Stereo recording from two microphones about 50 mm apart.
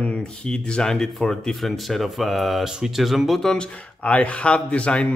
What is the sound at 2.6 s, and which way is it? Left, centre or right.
Speech, centre.